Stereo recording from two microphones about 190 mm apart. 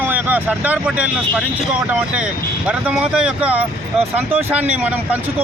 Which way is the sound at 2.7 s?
5° right (ahead or behind).